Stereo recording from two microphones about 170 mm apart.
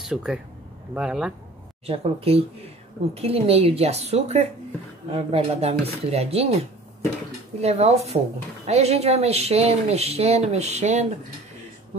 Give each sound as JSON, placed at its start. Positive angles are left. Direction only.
{"t": 0.0, "sound": "speech", "side_deg": -5}
{"t": 1.9, "sound": "speech", "side_deg": -35}
{"t": 7.6, "sound": "speech", "side_deg": -40}